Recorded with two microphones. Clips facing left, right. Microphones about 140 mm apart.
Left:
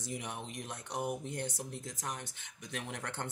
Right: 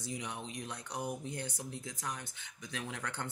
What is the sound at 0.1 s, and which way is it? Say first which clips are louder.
Speech: left 1 dB; 50° left (ahead or behind).